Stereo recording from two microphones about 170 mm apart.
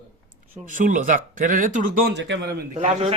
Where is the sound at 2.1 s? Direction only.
90° right.